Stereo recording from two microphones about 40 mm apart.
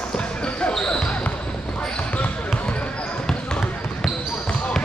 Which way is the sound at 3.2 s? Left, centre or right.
Left.